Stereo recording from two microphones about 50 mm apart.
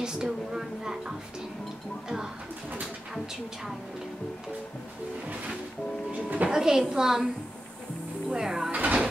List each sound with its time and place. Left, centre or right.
0.0 s a sound: centre
2.0 s a woman's voice: centre
6.1 s a sound: right
6.5 s a woman's voice: centre
8.3 s a woman's voice: centre
8.7 s speech: right